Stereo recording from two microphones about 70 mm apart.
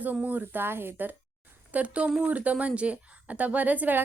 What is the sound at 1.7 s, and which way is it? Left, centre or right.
Speech, centre.